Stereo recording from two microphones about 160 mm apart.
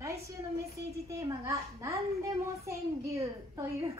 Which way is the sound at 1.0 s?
20° right (ahead or behind).